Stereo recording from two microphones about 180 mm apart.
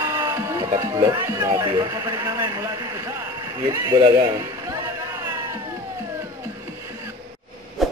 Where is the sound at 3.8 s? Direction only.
25° right (ahead or behind).